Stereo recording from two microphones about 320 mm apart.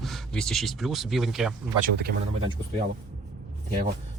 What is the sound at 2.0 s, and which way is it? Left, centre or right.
Speech, right.